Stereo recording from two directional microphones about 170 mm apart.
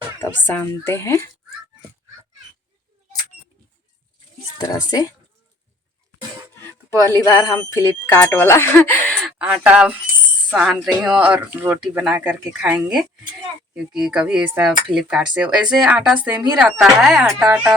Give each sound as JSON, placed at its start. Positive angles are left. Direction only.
{"t": 0.4, "sound": "speech", "side_deg": 10}
{"t": 4.6, "sound": "a woman's voice", "side_deg": 25}
{"t": 6.7, "sound": "speech", "side_deg": 20}
{"t": 9.2, "sound": "speech", "side_deg": -5}